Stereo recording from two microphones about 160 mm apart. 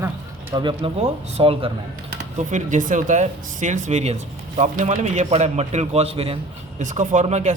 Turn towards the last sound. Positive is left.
turn(degrees=-45)  # may be behind; listen again after turning